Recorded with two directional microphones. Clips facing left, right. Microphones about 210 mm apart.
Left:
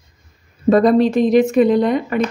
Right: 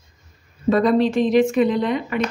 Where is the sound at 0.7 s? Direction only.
45° left (ahead or behind).